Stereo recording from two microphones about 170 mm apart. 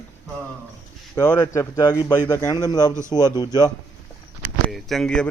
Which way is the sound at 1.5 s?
20° left (ahead or behind).